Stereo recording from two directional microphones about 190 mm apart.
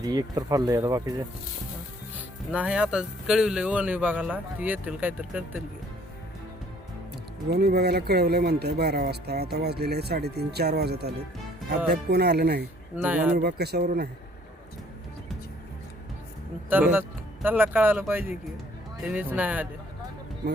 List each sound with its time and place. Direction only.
0.0 s speech: 20° right (ahead or behind)
2.5 s speech: 5° right (ahead or behind)
7.5 s speech: 60° right (ahead or behind)
13.0 s speech: 10° right (ahead or behind)
13.3 s speech: 55° right (ahead or behind)
16.6 s speech: 10° right (ahead or behind)